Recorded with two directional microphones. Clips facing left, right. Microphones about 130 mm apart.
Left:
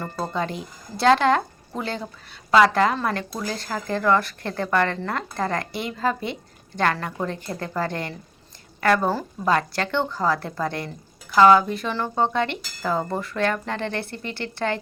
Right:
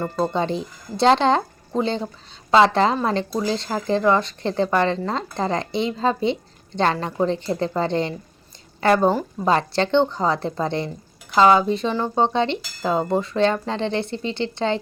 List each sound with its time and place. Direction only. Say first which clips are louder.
0.0 s speech: right 5 dB; 25° right (ahead or behind)